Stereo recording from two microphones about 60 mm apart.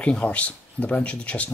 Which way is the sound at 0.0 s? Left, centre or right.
Left.